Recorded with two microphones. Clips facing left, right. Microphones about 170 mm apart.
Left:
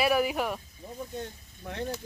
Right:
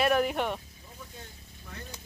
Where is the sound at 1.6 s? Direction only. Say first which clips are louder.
Left 11 dB; 65° left (ahead or behind).